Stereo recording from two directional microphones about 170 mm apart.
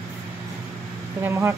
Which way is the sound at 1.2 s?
15° right (ahead or behind).